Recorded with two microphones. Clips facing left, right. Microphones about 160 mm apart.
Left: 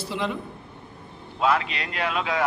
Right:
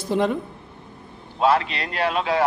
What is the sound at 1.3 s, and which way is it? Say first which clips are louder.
A man's voice: right 4 dB; 35° right (ahead or behind).